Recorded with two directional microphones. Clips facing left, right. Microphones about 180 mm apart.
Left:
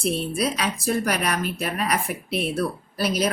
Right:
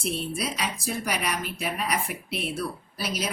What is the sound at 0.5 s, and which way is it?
A woman's voice, 65° left (ahead or behind).